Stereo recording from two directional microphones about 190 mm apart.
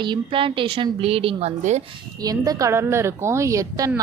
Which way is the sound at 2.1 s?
20° right (ahead or behind).